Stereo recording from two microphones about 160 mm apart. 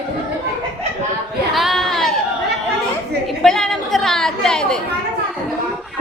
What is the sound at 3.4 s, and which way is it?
A woman's voice, centre (ahead or behind).